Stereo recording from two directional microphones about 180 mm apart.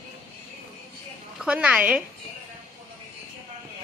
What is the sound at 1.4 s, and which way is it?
Speech, 5° right (ahead or behind).